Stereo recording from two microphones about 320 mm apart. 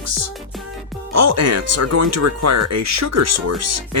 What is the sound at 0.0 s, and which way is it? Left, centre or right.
Music, right.